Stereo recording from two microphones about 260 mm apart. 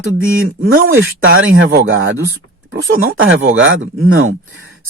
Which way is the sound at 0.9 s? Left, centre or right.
Right.